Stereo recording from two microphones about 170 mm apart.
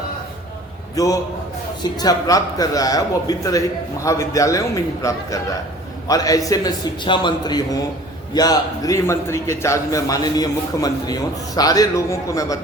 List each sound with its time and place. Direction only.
0.9 s a man's voice: 20° left (ahead or behind)